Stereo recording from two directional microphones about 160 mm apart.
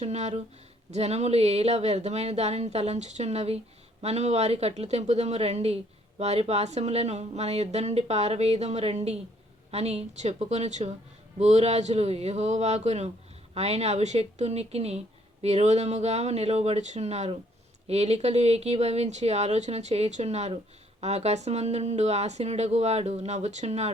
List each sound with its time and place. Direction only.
0.0 s speech: 45° right (ahead or behind)